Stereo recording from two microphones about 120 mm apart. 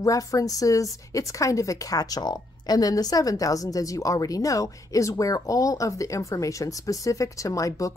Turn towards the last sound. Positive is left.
turn(degrees=25)  # may be behind; listen again after turning